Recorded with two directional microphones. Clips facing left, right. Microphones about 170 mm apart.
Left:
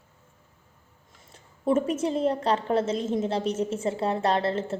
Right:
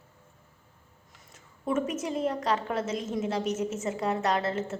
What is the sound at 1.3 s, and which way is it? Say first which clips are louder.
A woman's voice: left 5 dB; 30° left (ahead or behind).